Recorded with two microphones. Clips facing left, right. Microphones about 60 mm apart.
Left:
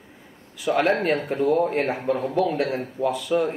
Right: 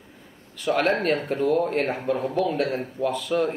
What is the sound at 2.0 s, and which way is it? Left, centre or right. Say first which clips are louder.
Speech: left 1 dB; left.